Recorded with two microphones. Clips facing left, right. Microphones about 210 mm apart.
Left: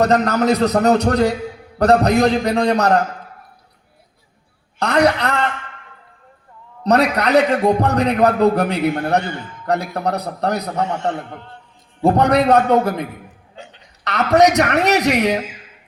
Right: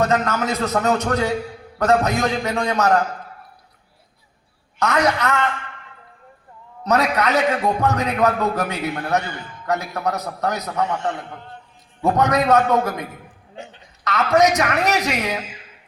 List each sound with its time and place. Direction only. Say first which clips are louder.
0.0 s a man's voice: left 5 dB; 35° left (ahead or behind)
4.8 s a man's voice: left 4 dB; 35° left (ahead or behind)
6.8 s a man's voice: left 3 dB; 35° left (ahead or behind)
14.1 s a man's voice: left 3 dB; 40° left (ahead or behind)